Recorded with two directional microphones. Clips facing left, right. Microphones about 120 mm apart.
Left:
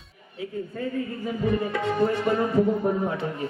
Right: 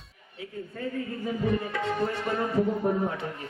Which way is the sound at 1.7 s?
20° left (ahead or behind).